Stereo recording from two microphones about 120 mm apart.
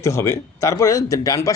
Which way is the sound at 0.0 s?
25° left (ahead or behind).